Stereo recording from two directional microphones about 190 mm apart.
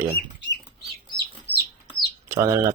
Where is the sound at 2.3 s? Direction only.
15° right (ahead or behind).